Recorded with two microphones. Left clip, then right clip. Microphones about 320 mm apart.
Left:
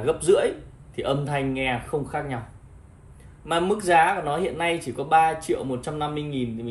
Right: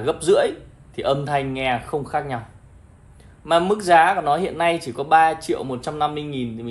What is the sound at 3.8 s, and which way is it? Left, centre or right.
Speech, right.